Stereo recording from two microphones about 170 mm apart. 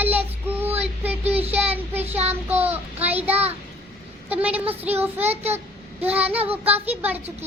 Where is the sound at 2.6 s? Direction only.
10° right (ahead or behind).